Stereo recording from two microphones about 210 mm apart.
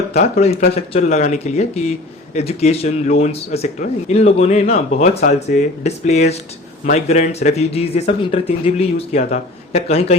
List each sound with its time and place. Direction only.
0.3 s speech: 30° left (ahead or behind)